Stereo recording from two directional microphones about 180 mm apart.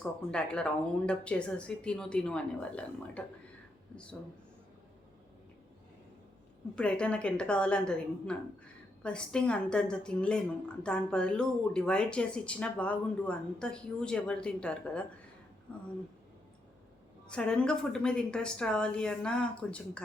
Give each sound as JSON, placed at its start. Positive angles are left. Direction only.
{"t": 0.3, "sound": "speech", "side_deg": 5}
{"t": 6.7, "sound": "speech", "side_deg": 5}
{"t": 17.2, "sound": "speech", "side_deg": 5}